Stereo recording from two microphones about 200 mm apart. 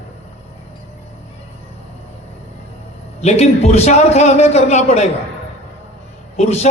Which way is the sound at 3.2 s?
35° left (ahead or behind).